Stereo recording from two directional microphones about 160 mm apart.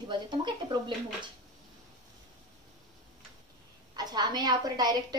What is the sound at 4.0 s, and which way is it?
A woman's voice, 25° right (ahead or behind).